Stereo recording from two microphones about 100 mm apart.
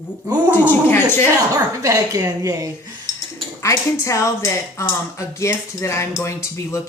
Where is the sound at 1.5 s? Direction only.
35° right (ahead or behind).